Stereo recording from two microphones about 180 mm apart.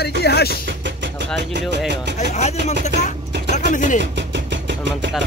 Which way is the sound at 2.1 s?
40° left (ahead or behind).